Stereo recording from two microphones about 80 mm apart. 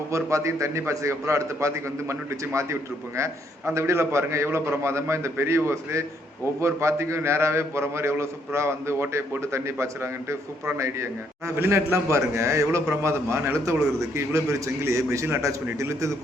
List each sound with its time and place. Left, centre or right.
0.1 s a man's voice: right
14.8 s a man's voice: right